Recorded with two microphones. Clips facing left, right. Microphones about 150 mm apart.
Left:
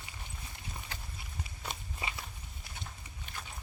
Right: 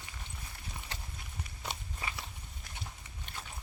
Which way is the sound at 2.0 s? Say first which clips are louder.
Left 3 dB; 15° left (ahead or behind).